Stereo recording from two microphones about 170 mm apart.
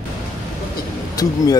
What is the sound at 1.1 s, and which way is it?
Speech, 20° left (ahead or behind).